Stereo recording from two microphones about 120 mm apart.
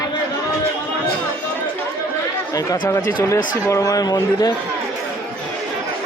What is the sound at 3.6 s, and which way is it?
Speech, 25° left (ahead or behind).